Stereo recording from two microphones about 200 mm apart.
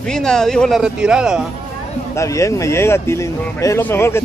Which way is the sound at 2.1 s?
15° left (ahead or behind).